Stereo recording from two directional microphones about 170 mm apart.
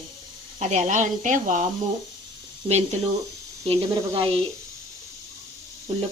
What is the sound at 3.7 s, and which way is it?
Speech, 35° right (ahead or behind).